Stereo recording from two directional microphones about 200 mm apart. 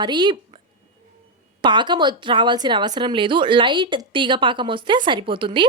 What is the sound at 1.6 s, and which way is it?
A woman's voice, 25° right (ahead or behind).